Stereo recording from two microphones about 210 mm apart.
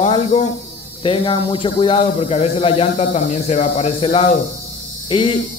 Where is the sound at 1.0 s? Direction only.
25° left (ahead or behind).